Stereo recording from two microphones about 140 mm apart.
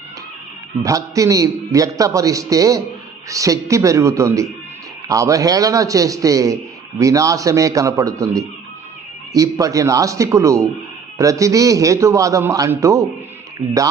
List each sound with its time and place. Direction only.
0.8 s a man's voice: 25° right (ahead or behind)